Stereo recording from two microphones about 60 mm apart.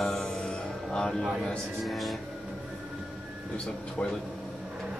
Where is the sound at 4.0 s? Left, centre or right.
Left.